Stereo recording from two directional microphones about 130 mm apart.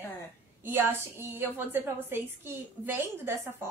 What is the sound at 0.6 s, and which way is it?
A woman's voice, 15° right (ahead or behind).